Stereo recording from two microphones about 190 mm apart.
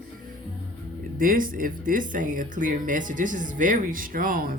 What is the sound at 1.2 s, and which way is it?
Speech, 45° right (ahead or behind).